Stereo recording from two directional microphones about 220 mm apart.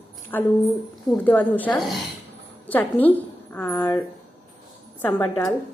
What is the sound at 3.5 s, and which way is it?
A woman's voice, 10° left (ahead or behind).